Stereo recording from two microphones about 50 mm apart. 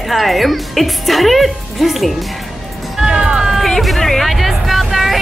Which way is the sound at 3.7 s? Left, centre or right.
Centre.